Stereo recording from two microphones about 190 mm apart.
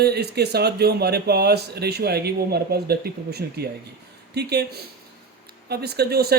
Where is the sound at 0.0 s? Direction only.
60° right (ahead or behind).